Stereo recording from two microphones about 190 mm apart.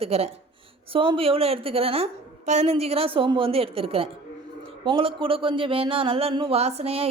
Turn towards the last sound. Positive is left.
turn(degrees=-30)  # may be behind; listen again after turning